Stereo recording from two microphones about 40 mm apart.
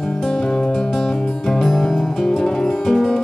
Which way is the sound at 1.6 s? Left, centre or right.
Centre.